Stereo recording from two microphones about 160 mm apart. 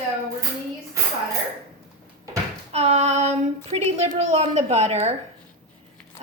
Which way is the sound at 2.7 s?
40° right (ahead or behind).